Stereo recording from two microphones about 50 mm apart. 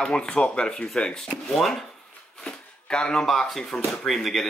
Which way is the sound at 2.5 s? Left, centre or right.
Centre.